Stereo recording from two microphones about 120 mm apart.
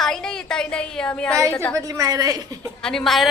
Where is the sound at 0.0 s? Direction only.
5° left (ahead or behind).